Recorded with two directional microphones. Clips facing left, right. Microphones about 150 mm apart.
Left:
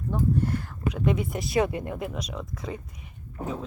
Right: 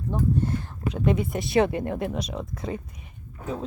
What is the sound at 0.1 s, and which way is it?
Speech, 20° right (ahead or behind).